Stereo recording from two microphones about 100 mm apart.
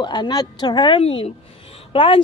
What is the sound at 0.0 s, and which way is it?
A woman's voice, 50° left (ahead or behind).